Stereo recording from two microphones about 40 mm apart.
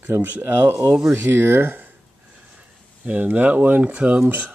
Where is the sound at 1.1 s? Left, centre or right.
Right.